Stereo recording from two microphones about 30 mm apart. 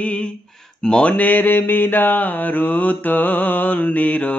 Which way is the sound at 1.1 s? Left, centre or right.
Left.